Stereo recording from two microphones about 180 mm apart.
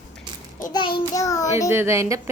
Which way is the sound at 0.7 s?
25° left (ahead or behind).